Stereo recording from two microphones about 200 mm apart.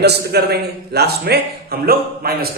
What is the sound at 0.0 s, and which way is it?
A man's voice, 55° right (ahead or behind).